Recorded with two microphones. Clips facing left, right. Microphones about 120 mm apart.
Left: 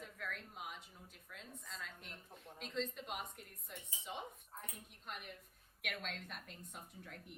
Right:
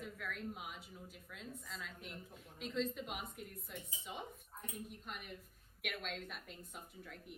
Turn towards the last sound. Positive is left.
turn(degrees=0)  # may be behind; listen again after turning